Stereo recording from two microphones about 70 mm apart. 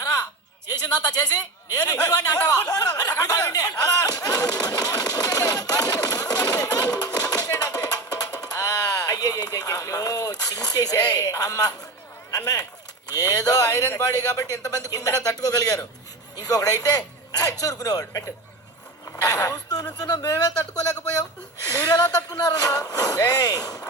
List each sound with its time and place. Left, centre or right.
0.7 s speech: left
6.9 s music: left
11.3 s speech: left
13.1 s speech: left
19.2 s speech: left
20.0 s speech: left